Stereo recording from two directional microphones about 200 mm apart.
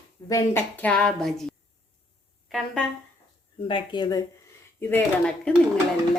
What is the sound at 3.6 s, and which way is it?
Speech, 25° left (ahead or behind).